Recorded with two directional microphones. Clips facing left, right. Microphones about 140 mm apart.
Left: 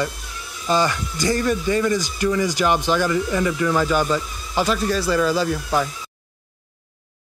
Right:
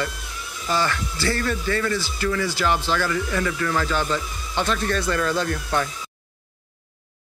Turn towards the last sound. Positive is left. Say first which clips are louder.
# left 3 dB
turn(degrees=10)  # may be behind; listen again after turning